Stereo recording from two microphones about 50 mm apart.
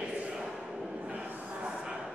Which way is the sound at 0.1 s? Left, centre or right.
Centre.